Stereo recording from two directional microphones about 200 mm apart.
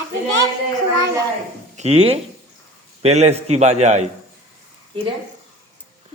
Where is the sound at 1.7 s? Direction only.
35° right (ahead or behind).